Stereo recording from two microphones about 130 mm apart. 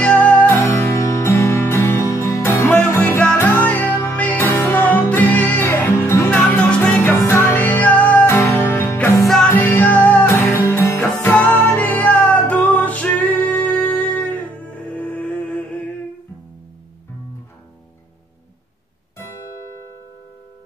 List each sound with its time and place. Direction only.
0.0 s music: 10° left (ahead or behind)
9.1 s music: centre (ahead or behind)
9.5 s music: 15° left (ahead or behind)